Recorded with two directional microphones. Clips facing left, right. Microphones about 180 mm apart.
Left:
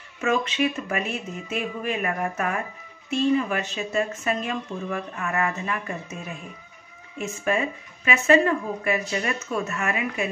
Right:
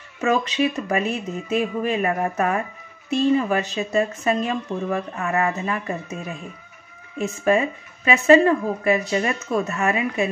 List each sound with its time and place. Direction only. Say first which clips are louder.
0.2 s speech: right 3 dB; 35° right (ahead or behind)
7.2 s speech: right 6 dB; 30° right (ahead or behind)